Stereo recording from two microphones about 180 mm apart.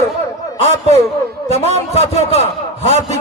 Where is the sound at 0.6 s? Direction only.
40° right (ahead or behind).